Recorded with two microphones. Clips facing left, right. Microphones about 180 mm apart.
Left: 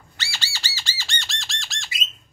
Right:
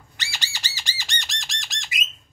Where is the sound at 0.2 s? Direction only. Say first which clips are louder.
Left 1 dB; 15° right (ahead or behind).